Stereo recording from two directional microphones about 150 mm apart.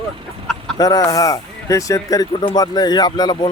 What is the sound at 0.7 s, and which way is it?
Speech, 25° left (ahead or behind).